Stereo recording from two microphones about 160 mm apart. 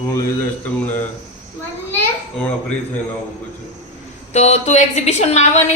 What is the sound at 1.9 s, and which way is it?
Speech, 10° left (ahead or behind).